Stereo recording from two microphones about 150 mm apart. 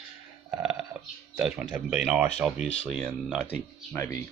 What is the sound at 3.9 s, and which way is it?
Speech, 15° left (ahead or behind).